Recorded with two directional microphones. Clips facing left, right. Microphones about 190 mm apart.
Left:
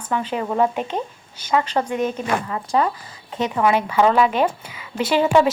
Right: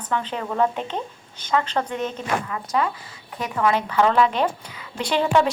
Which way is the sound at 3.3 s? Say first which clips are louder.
Left 3 dB; 20° left (ahead or behind).